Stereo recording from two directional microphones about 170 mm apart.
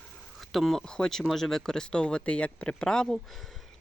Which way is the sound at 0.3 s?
Centre (ahead or behind).